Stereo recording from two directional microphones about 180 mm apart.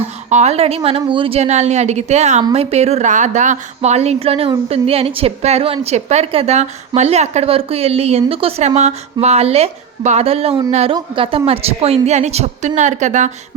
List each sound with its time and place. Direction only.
0.0 s a woman's voice: 40° right (ahead or behind)